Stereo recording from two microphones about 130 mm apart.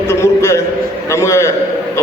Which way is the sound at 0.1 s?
25° left (ahead or behind).